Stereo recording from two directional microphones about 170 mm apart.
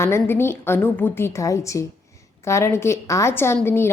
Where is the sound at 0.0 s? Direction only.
15° left (ahead or behind).